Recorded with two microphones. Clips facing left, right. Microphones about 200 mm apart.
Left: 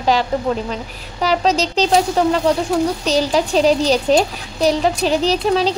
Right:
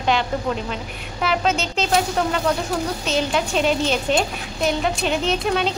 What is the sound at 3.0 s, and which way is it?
A woman's voice, 35° left (ahead or behind).